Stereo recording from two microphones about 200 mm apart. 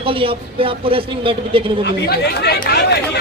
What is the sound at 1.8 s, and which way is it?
Speech, 55° left (ahead or behind).